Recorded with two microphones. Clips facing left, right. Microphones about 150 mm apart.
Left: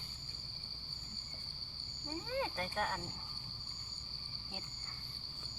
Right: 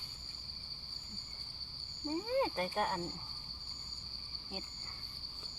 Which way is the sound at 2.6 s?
30° right (ahead or behind).